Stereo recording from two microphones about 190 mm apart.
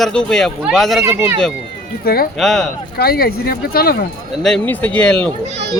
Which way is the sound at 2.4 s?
Centre (ahead or behind).